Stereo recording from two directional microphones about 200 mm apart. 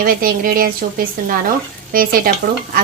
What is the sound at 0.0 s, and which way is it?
A woman's voice, 45° right (ahead or behind).